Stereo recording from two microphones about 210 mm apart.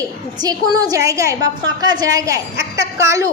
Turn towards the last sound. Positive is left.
turn(degrees=-15)  # may be behind; listen again after turning